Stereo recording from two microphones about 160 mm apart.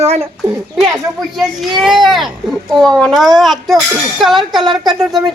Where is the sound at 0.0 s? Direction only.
40° right (ahead or behind).